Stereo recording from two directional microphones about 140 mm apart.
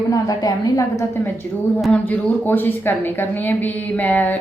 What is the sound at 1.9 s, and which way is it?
A woman's voice, 10° left (ahead or behind).